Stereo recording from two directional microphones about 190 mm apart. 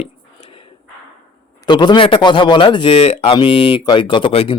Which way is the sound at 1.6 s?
25° left (ahead or behind).